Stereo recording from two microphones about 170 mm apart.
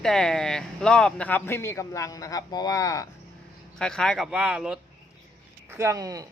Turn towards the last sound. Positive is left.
turn(degrees=-20)  # may be behind; listen again after turning